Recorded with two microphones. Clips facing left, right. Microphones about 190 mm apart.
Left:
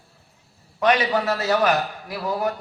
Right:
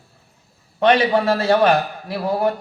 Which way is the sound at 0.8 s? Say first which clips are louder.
Right 4 dB; 30° right (ahead or behind).